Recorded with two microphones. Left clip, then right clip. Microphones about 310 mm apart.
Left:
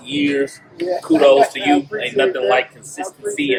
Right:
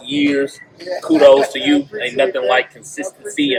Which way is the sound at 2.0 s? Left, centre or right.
Centre.